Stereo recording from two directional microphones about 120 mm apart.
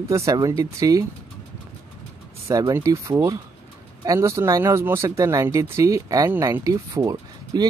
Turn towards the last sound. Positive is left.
turn(degrees=-30)  # may be behind; listen again after turning